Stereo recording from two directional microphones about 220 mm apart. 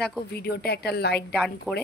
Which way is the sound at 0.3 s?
45° left (ahead or behind).